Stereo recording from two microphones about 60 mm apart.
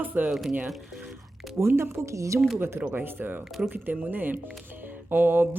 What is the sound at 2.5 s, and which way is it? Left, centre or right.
Speech, right.